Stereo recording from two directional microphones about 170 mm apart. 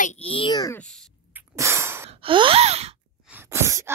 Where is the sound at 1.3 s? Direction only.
15° right (ahead or behind).